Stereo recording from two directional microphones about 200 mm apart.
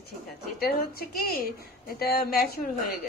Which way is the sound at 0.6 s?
50° left (ahead or behind).